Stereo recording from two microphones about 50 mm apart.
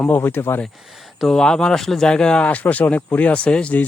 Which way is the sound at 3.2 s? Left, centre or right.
Left.